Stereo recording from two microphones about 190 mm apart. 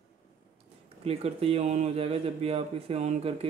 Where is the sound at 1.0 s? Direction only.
30° right (ahead or behind).